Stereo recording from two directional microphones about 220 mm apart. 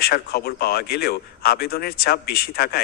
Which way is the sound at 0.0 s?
45° left (ahead or behind).